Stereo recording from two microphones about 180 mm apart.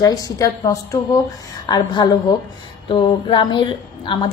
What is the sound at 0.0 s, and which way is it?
A woman's voice, 20° left (ahead or behind).